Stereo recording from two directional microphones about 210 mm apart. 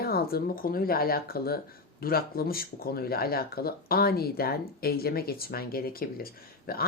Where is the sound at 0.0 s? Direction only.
45° left (ahead or behind).